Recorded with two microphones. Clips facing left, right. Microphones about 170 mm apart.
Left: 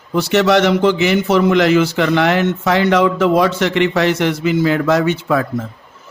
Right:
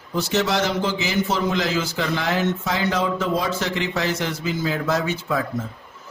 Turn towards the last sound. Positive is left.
turn(degrees=70)  # may be behind; listen again after turning